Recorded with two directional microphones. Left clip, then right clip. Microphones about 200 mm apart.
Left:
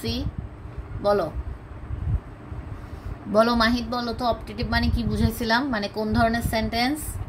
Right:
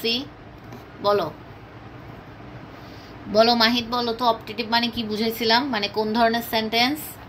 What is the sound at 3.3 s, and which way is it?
A woman's voice, 40° left (ahead or behind).